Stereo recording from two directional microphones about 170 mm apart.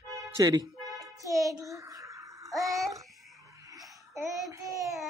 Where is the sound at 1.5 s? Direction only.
20° right (ahead or behind).